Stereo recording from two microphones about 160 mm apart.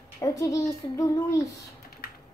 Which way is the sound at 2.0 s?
70° left (ahead or behind).